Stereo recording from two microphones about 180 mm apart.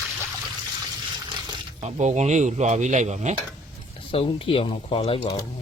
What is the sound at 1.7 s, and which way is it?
Speech, 35° right (ahead or behind).